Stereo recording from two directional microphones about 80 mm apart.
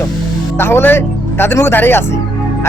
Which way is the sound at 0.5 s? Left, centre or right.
Left.